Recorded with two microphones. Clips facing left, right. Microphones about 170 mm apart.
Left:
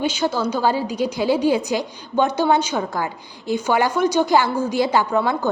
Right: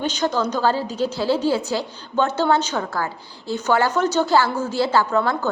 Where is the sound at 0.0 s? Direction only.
10° left (ahead or behind).